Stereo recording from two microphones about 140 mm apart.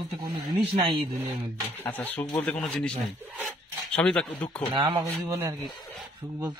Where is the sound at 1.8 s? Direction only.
15° left (ahead or behind).